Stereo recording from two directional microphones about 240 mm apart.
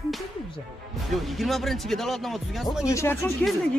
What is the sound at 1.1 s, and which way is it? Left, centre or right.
Speech, centre.